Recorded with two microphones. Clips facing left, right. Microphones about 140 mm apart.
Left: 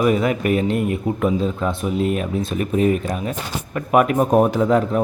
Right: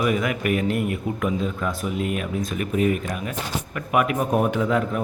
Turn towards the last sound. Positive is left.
turn(degrees=35)  # may be behind; listen again after turning